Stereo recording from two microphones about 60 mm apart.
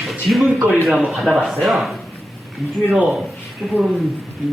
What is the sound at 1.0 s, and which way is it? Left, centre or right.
Speech, centre.